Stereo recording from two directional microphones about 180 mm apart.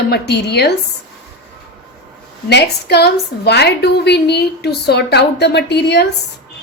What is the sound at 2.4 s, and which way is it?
A woman's voice, 70° left (ahead or behind).